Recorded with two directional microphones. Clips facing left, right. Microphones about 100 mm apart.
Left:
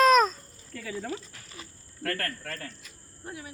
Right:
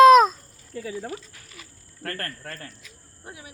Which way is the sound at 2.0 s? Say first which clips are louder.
Left 2 dB; 30° right (ahead or behind).